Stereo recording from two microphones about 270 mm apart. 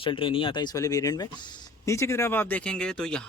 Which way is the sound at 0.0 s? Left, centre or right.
Centre.